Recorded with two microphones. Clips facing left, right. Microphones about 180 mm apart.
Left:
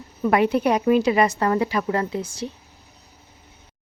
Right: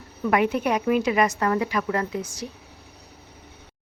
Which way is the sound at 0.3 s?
30° left (ahead or behind).